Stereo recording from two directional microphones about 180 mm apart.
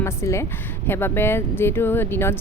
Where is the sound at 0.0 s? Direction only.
15° left (ahead or behind).